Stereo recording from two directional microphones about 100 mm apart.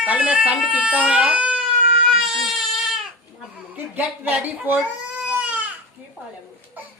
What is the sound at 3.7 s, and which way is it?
Speech, 20° right (ahead or behind).